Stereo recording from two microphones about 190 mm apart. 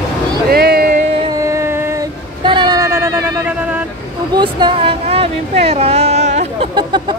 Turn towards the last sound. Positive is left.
turn(degrees=-25)  # may be behind; listen again after turning